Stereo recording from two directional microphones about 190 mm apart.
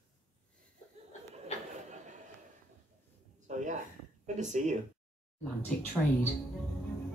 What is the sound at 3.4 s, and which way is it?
Speech, 40° right (ahead or behind).